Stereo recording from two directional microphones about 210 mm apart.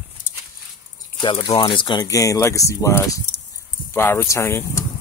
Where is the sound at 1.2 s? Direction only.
20° left (ahead or behind).